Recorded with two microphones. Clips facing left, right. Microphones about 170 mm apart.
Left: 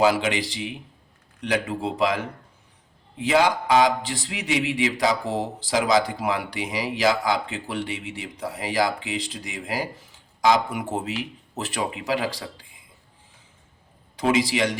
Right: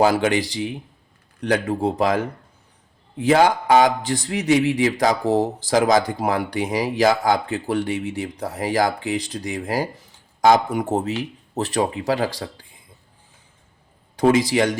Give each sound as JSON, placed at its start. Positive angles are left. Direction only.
{"t": 0.0, "sound": "a man's voice", "side_deg": -45}
{"t": 1.5, "sound": "a man's voice", "side_deg": -45}
{"t": 14.2, "sound": "a man's voice", "side_deg": -50}